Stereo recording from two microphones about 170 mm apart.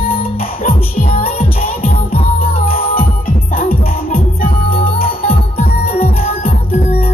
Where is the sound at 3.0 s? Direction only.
55° left (ahead or behind).